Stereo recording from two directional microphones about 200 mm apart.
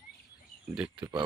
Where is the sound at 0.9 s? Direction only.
20° right (ahead or behind).